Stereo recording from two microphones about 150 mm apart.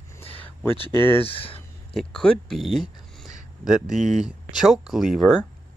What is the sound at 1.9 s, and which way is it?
Speech, 5° left (ahead or behind).